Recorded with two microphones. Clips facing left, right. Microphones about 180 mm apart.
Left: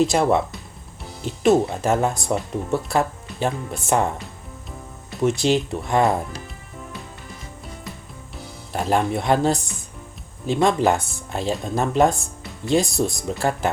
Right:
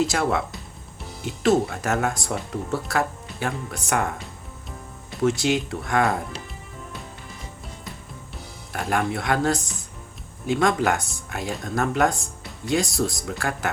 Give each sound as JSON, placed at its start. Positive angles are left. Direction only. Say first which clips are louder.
{"t": 0.0, "sound": "speech", "louder": "left 5 dB", "side_deg": 25}
{"t": 5.2, "sound": "speech", "louder": "left 2 dB", "side_deg": 20}
{"t": 8.7, "sound": "speech", "louder": "left 4 dB", "side_deg": 25}